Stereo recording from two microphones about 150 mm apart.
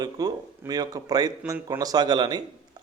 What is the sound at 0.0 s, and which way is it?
A man's voice, 25° right (ahead or behind).